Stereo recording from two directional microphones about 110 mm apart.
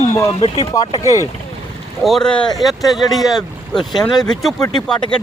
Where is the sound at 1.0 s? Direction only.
30° left (ahead or behind).